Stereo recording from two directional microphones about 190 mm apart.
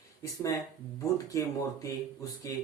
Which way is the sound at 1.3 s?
15° left (ahead or behind).